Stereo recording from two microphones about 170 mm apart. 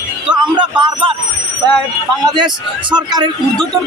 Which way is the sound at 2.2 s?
25° right (ahead or behind).